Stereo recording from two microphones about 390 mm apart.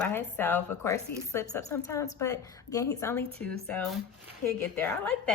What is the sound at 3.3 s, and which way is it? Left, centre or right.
Speech, right.